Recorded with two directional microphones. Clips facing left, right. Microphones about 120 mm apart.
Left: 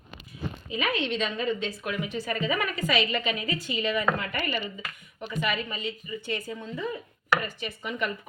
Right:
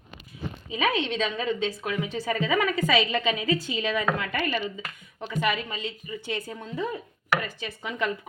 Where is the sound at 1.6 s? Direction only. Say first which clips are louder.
Right 2 dB; 90° right.